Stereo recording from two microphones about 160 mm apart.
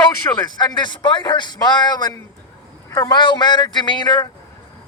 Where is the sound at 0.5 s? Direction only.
25° left (ahead or behind).